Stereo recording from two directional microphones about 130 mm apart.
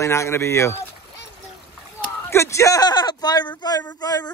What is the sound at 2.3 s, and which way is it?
Speech, 20° left (ahead or behind).